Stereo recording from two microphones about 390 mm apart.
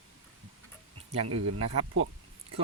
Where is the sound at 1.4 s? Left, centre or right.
Right.